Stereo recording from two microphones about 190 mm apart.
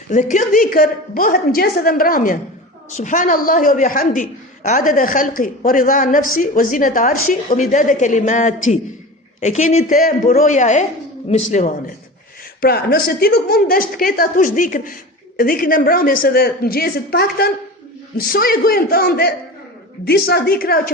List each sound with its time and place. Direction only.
0.1 s a woman's voice: 40° left (ahead or behind)
12.6 s a woman's voice: 55° left (ahead or behind)